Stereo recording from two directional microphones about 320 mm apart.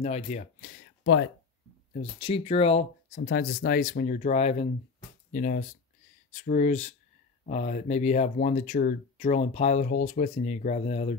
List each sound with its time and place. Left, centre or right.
0.0 s speech: left
1.0 s speech: left
2.0 s speech: centre
3.3 s speech: left